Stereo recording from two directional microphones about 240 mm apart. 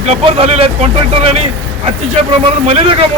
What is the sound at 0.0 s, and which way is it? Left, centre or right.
Speech, right.